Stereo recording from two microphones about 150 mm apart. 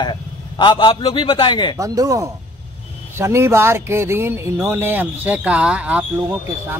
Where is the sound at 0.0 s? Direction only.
30° left (ahead or behind).